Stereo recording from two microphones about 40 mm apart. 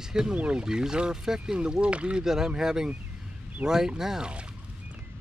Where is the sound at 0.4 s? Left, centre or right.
Right.